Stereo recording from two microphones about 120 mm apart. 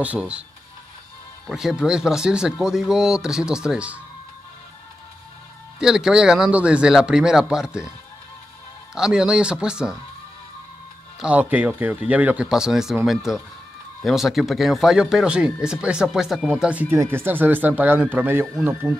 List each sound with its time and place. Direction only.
0.0 s speech: 10° right (ahead or behind)
1.5 s speech: 5° right (ahead or behind)
5.8 s speech: 5° right (ahead or behind)
8.9 s speech: 5° right (ahead or behind)
11.1 s speech: 10° right (ahead or behind)
16.9 s speech: 20° right (ahead or behind)